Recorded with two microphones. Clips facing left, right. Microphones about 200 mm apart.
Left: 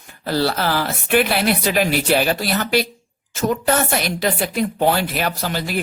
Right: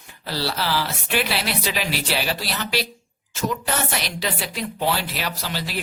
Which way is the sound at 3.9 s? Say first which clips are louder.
Left 7 dB; 50° left (ahead or behind).